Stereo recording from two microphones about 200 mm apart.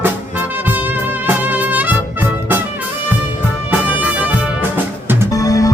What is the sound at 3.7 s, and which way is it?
Music, 10° right (ahead or behind).